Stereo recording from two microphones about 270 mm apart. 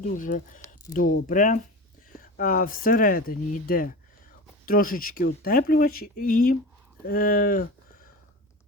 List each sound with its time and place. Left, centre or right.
0.0 s speech: left